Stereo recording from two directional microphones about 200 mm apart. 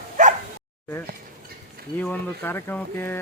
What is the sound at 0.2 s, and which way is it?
Bow-wow, 40° right (ahead or behind).